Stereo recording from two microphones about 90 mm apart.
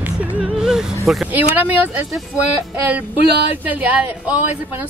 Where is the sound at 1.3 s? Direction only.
20° right (ahead or behind).